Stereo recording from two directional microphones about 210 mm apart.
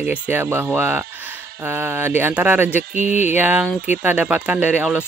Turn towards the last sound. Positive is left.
turn(degrees=-5)  # may be behind; listen again after turning